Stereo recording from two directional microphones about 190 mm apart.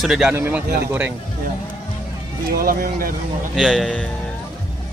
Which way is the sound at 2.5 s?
50° right (ahead or behind).